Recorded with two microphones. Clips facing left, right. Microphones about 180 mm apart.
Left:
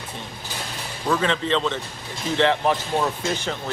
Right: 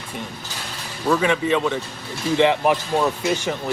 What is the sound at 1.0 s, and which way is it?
Speech, 10° right (ahead or behind).